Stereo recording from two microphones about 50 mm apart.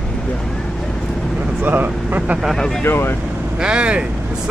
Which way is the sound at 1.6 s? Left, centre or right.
Right.